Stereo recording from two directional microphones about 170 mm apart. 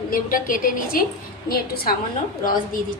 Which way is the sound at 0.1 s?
55° left (ahead or behind).